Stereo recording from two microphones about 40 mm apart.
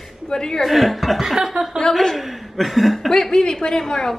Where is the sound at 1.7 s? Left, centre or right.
Centre.